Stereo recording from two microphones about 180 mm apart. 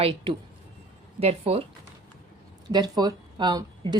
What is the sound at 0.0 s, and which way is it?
Speech, 30° right (ahead or behind).